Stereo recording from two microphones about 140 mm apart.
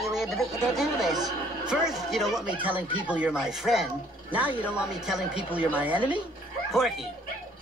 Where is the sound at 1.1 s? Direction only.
30° right (ahead or behind).